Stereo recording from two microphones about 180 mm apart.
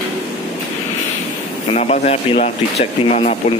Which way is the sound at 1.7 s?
35° left (ahead or behind).